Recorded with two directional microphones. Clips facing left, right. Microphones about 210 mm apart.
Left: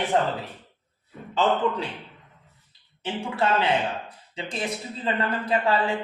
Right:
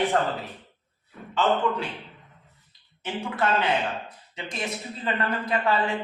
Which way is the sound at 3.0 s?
30° left (ahead or behind).